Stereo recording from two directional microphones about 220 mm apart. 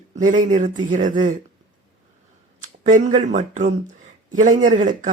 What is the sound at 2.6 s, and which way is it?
Speech, 35° right (ahead or behind).